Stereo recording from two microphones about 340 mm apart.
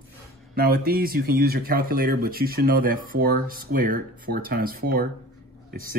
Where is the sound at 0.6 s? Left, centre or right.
Right.